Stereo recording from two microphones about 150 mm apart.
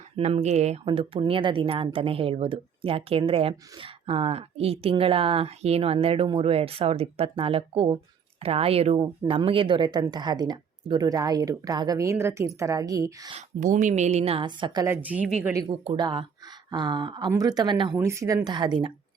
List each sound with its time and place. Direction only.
0.2 s speech: 45° right (ahead or behind); by 13.3 s 20° right (ahead or behind)
13.3 s speech: 55° right (ahead or behind)
14.4 s speech: 30° right (ahead or behind)
14.8 s speech: 10° right (ahead or behind)
15.7 s speech: 45° right (ahead or behind)
16.0 s speech: 30° right (ahead or behind)
17.9 s speech: 20° right (ahead or behind)